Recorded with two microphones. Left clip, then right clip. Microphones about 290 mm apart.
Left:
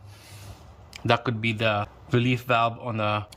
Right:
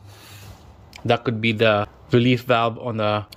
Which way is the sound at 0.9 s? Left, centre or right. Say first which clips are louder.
Right 3 dB; centre.